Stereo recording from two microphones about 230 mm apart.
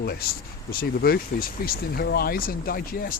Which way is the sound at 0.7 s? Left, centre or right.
Left.